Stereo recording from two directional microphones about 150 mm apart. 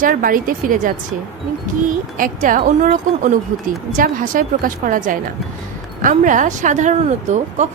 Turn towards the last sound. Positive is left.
turn(degrees=-50)  # may be behind; listen again after turning